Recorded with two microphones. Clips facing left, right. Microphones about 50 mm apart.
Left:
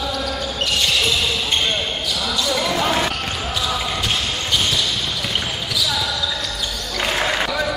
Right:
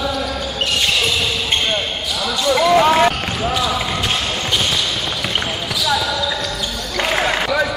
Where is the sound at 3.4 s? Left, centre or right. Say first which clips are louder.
Right 7 dB; centre.